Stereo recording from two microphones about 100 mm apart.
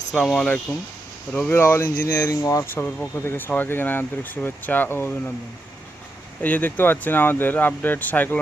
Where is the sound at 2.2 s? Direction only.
35° left (ahead or behind).